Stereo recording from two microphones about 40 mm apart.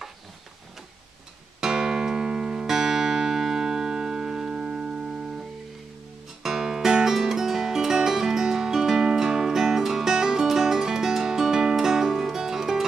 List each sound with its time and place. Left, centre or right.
1.6 s music: centre
4.6 s music: right
6.4 s music: centre